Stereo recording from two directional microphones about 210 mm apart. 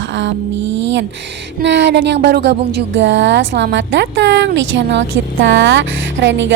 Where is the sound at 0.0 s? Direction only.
60° right (ahead or behind).